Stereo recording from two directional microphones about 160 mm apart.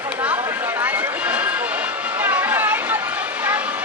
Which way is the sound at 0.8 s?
10° right (ahead or behind).